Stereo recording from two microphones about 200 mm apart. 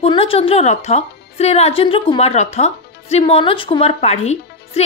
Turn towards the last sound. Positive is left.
turn(degrees=35)  # may be behind; listen again after turning